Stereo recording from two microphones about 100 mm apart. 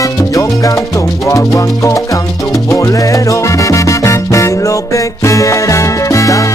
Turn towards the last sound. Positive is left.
turn(degrees=35)  # may be behind; listen again after turning